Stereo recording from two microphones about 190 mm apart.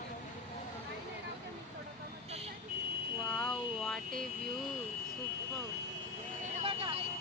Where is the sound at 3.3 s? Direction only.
5° left (ahead or behind).